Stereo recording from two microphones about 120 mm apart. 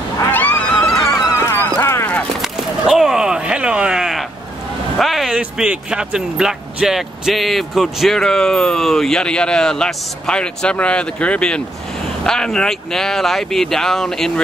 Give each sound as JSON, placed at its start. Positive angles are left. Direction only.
{"t": 0.2, "sound": "neigh", "side_deg": 15}
{"t": 1.1, "sound": "dog", "side_deg": 25}
{"t": 2.4, "sound": "a sound", "side_deg": -5}
{"t": 4.9, "sound": "speech", "side_deg": 0}